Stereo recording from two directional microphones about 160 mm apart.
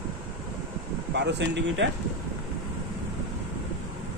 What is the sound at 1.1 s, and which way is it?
Speech, 90° right.